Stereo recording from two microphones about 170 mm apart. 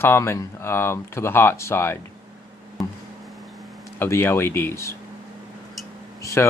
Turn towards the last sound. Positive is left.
turn(degrees=15)  # may be behind; listen again after turning